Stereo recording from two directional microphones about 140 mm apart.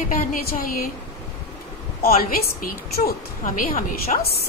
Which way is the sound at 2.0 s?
90° left.